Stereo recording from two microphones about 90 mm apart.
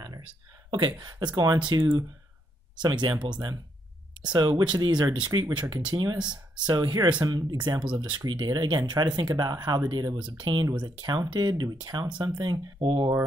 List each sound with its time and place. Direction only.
0.7 s speech: 55° right (ahead or behind)
7.8 s speech: 65° right (ahead or behind)
10.7 s speech: 50° right (ahead or behind)